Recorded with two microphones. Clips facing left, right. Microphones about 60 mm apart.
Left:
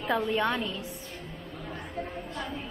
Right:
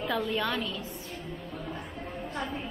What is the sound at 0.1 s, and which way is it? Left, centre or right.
Speech, left.